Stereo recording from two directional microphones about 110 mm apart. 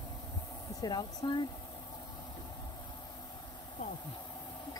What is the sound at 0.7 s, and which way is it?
Speech, 40° left (ahead or behind).